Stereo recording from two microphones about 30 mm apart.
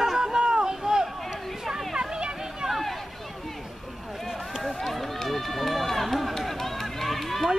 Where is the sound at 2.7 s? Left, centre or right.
Centre.